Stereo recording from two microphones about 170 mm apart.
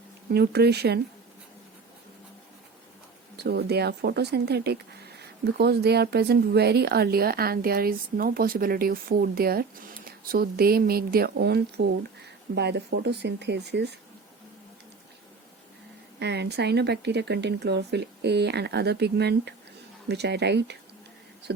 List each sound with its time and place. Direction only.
0.3 s speech: 70° right (ahead or behind)
3.3 s speech: 70° right (ahead or behind)
16.1 s speech: 80° right